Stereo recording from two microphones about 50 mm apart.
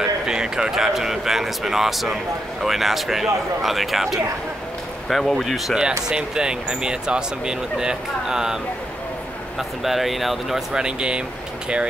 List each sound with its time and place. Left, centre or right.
0.0 s speech: centre
6.0 s speech: centre
9.6 s speech: centre
10.7 s speech: centre